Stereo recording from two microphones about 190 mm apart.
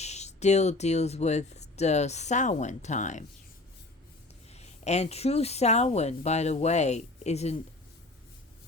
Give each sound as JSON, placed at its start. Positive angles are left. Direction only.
{"t": 0.0, "sound": "speech", "side_deg": 35}
{"t": 4.5, "sound": "speech", "side_deg": 35}